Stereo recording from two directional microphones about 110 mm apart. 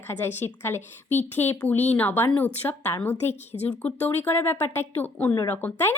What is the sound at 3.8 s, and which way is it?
A woman's voice, 15° left (ahead or behind).